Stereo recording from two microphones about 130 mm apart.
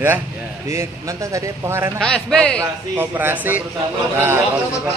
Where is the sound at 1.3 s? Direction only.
20° right (ahead or behind).